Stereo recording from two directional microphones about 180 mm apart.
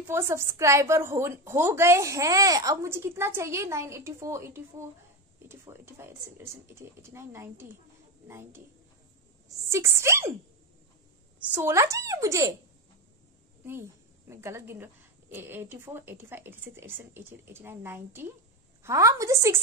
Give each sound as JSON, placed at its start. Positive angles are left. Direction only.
{"t": 0.1, "sound": "a woman's voice", "side_deg": -15}
{"t": 11.3, "sound": "a woman's voice", "side_deg": -10}
{"t": 14.3, "sound": "a woman's voice", "side_deg": -15}